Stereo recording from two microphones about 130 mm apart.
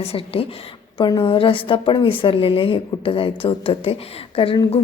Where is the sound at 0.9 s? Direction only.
30° left (ahead or behind).